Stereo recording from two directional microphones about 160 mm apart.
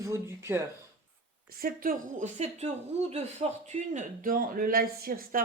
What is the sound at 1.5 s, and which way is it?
A woman's voice, 65° right (ahead or behind).